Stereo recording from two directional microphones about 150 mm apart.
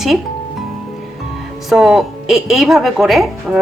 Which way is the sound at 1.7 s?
Centre (ahead or behind).